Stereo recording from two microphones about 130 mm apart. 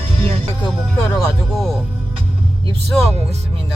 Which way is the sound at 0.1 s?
40° right (ahead or behind).